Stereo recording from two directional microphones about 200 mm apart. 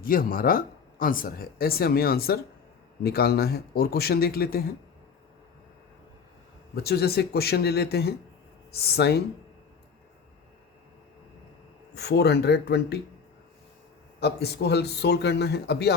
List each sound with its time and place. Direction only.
0.0 s speech: 45° left (ahead or behind)
6.7 s speech: 50° left (ahead or behind)
11.9 s speech: 55° left (ahead or behind)
14.2 s speech: 55° left (ahead or behind)